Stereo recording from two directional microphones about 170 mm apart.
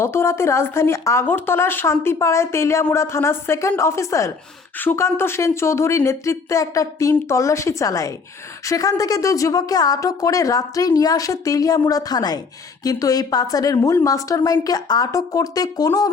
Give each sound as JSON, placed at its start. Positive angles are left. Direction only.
{"t": 0.0, "sound": "speech", "side_deg": 15}